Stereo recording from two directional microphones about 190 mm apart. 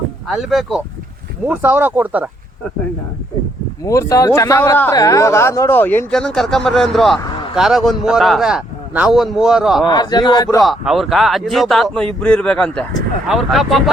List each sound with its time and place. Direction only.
0.3 s a man's voice: centre (ahead or behind)
3.8 s a man's voice: 15° left (ahead or behind); by 7.2 s centre (ahead or behind)
7.2 s a sound: 25° left (ahead or behind)
7.5 s a man's voice: centre (ahead or behind)
9.8 s a man's voice: 20° left (ahead or behind)
10.6 s a man's voice: centre (ahead or behind)